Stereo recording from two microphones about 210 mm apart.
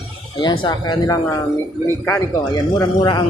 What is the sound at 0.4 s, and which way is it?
Speech, 20° left (ahead or behind).